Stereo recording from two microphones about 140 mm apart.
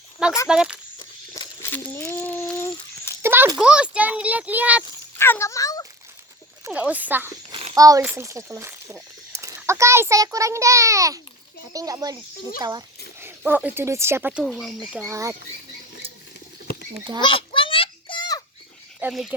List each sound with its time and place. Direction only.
0.4 s speech: 5° right (ahead or behind)
0.9 s walk: 30° left (ahead or behind)
1.7 s a sound: 15° left (ahead or behind)
3.2 s a sound: 15° right (ahead or behind)
3.6 s a child's voice: 5° right (ahead or behind)
5.1 s speech: 15° left (ahead or behind)
6.7 s a child's voice: 10° right (ahead or behind)
7.5 s a sound: 40° right (ahead or behind)
7.8 s a child's voice: 25° right (ahead or behind)
13.1 s speech: 15° right (ahead or behind)
14.4 s speech: centre (ahead or behind)
15.0 s a child's voice: 20° right (ahead or behind)
17.2 s a sound: 35° left (ahead or behind)
18.9 s speech: 5° right (ahead or behind)